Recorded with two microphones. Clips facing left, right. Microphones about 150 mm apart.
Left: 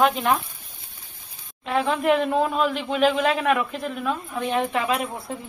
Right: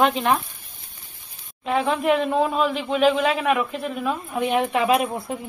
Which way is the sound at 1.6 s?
Centre (ahead or behind).